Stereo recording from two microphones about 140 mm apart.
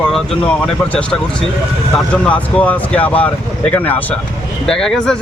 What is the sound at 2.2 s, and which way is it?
A man's voice, 10° left (ahead or behind).